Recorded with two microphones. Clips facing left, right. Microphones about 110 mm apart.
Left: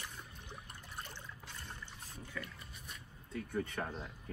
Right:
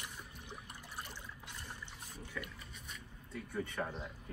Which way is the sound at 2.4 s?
5° right (ahead or behind).